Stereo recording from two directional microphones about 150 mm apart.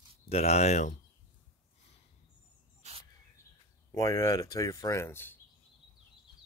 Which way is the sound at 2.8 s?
50° right (ahead or behind).